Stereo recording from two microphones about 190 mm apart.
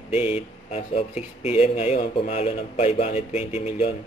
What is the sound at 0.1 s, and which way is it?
Speech, 30° left (ahead or behind).